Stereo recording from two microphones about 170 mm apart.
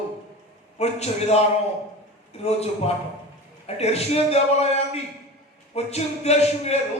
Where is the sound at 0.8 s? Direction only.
40° left (ahead or behind).